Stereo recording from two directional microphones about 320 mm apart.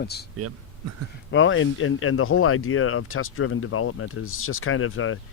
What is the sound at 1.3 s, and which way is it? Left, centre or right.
Speech, left.